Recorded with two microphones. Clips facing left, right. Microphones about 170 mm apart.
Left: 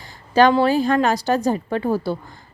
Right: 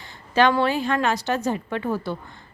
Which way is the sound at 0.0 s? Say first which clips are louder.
Left 4 dB; 35° left (ahead or behind).